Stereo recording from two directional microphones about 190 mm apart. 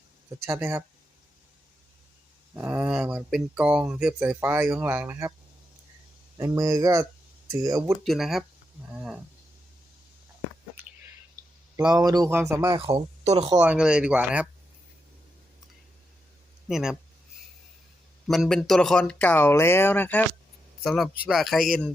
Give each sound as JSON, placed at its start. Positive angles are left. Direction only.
{"t": 0.4, "sound": "speech", "side_deg": -15}
{"t": 2.6, "sound": "speech", "side_deg": -10}
{"t": 6.3, "sound": "speech", "side_deg": -15}
{"t": 8.0, "sound": "speech", "side_deg": 0}
{"t": 11.8, "sound": "speech", "side_deg": -20}
{"t": 12.8, "sound": "speech", "side_deg": -30}
{"t": 13.5, "sound": "speech", "side_deg": -10}
{"t": 16.6, "sound": "speech", "side_deg": 0}
{"t": 18.3, "sound": "speech", "side_deg": 0}